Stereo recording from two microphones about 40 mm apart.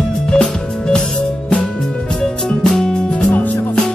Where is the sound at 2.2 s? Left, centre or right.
Centre.